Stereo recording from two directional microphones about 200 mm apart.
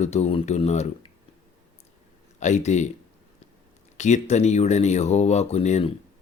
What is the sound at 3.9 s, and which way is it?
Speech, 35° left (ahead or behind).